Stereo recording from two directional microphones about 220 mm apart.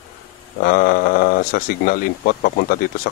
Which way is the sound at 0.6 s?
40° left (ahead or behind).